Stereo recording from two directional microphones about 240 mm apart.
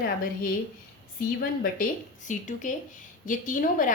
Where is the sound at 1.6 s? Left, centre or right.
Left.